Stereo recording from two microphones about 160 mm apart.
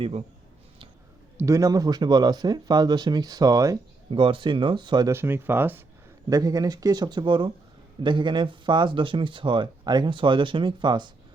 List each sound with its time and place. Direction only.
1.4 s speech: 20° right (ahead or behind)
4.1 s speech: 30° right (ahead or behind)
5.1 s speech: 15° right (ahead or behind)
6.2 s speech: 25° right (ahead or behind)